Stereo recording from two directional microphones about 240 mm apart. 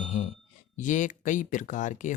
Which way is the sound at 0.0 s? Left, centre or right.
Left.